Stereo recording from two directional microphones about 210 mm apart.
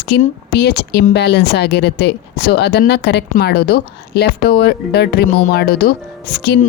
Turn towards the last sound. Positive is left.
turn(degrees=50)  # may be behind; listen again after turning